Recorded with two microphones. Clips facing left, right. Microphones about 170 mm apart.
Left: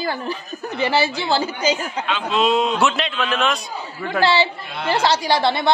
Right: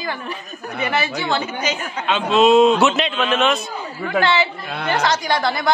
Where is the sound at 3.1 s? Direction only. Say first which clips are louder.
Right 3 dB; 25° right (ahead or behind).